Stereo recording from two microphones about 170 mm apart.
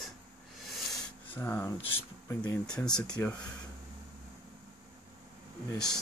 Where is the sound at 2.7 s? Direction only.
5° left (ahead or behind).